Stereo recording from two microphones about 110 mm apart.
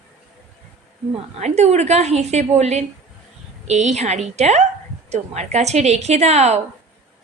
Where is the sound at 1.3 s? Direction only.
90° right.